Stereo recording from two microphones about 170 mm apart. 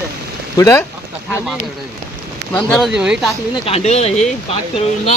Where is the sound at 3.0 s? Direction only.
5° right (ahead or behind).